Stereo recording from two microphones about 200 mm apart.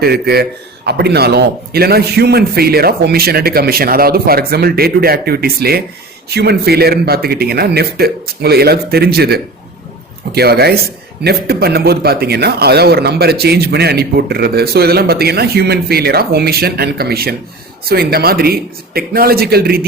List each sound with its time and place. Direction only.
0.0 s speech: 50° right (ahead or behind)